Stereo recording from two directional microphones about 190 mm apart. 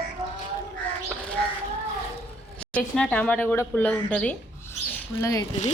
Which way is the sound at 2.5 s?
5° left (ahead or behind).